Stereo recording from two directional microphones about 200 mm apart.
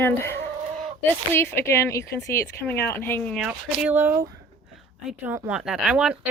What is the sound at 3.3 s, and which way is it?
Speech, 5° right (ahead or behind).